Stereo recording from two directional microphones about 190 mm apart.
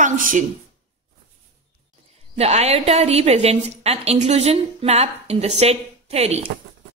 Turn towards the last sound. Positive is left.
turn(degrees=-35)  # may be behind; listen again after turning